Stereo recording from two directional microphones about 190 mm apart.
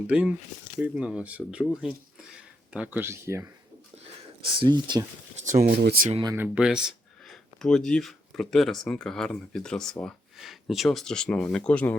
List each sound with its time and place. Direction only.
0.1 s speech: 5° right (ahead or behind)
4.6 s speech: 20° right (ahead or behind)
5.6 s speech: 55° right (ahead or behind)
6.2 s speech: 10° right (ahead or behind); by 11.9 s 5° left (ahead or behind)